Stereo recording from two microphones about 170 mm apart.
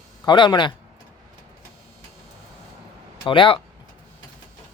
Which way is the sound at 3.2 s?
30° left (ahead or behind).